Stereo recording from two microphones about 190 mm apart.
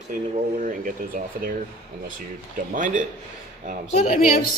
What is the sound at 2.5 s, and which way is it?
Speech, 45° right (ahead or behind).